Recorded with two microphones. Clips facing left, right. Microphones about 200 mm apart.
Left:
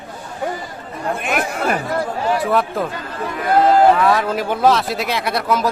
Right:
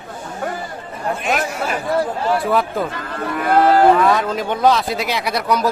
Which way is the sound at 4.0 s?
Centre (ahead or behind).